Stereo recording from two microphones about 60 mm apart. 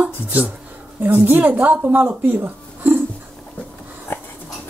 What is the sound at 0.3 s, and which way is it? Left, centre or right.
Speech, right.